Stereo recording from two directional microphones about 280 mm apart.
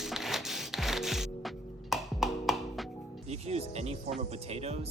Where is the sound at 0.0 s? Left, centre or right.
Centre.